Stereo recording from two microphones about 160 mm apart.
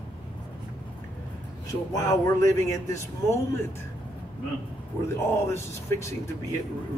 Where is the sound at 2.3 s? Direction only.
20° left (ahead or behind).